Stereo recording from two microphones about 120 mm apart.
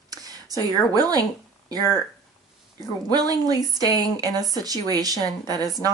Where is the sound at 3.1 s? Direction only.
30° right (ahead or behind).